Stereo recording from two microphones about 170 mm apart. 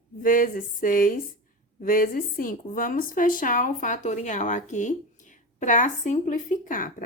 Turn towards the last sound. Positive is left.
turn(degrees=55)  # may be behind; listen again after turning